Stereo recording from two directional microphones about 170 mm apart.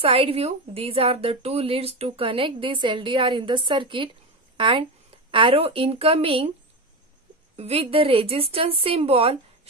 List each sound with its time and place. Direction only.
0.0 s a woman's voice: 35° right (ahead or behind)
7.5 s a woman's voice: 35° right (ahead or behind)